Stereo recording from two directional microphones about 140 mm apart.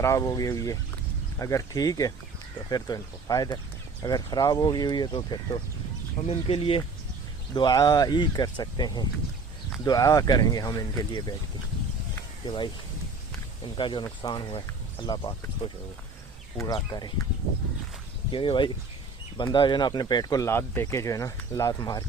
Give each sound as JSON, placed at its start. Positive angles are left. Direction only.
{"t": 0.0, "sound": "speech", "side_deg": 20}
{"t": 6.2, "sound": "speech", "side_deg": 45}
{"t": 7.5, "sound": "speech", "side_deg": 30}
{"t": 12.5, "sound": "speech", "side_deg": 35}
{"t": 13.7, "sound": "speech", "side_deg": 35}
{"t": 16.6, "sound": "speech", "side_deg": 25}
{"t": 18.3, "sound": "speech", "side_deg": 35}